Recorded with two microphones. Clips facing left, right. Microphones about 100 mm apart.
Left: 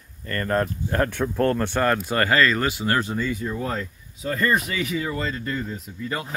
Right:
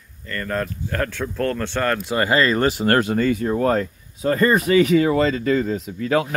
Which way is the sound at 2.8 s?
65° right (ahead or behind).